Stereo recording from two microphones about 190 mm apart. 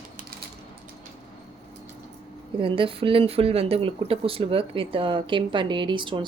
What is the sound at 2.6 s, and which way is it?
A woman's voice, 30° right (ahead or behind).